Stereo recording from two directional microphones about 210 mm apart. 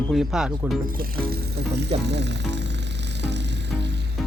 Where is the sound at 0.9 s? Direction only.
45° right (ahead or behind).